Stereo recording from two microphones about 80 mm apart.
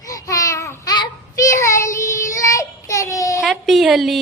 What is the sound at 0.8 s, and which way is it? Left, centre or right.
Child singing, left.